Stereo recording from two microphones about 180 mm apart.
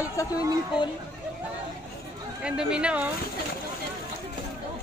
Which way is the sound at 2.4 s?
5° right (ahead or behind).